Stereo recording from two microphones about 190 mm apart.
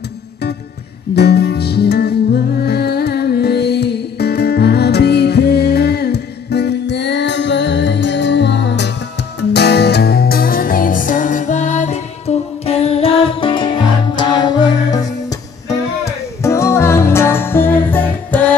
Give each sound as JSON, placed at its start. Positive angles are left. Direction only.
{"t": 1.1, "sound": "music", "side_deg": 60}
{"t": 16.4, "sound": "music", "side_deg": 15}